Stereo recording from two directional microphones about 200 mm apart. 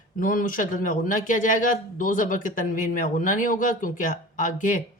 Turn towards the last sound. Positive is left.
turn(degrees=40)  # may be behind; listen again after turning